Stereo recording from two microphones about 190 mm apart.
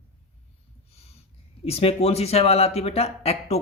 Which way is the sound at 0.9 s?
35° left (ahead or behind).